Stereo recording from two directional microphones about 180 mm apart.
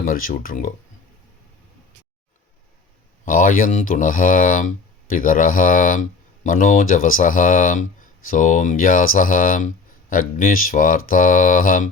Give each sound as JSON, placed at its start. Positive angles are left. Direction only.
{"t": 0.0, "sound": "speech", "side_deg": 50}
{"t": 3.2, "sound": "speech", "side_deg": 50}